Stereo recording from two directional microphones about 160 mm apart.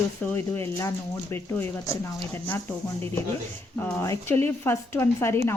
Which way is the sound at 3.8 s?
10° left (ahead or behind).